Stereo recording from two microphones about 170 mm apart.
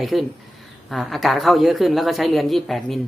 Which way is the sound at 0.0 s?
Centre (ahead or behind).